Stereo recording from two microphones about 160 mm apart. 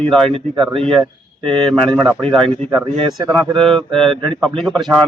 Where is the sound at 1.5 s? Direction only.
5° left (ahead or behind).